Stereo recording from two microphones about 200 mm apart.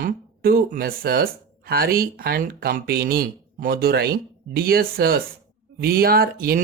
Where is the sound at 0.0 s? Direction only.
45° right (ahead or behind).